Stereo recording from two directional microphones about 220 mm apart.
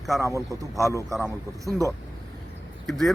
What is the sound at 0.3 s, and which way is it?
Speech, 15° right (ahead or behind).